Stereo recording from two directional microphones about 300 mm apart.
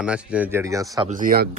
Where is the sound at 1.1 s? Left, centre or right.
Right.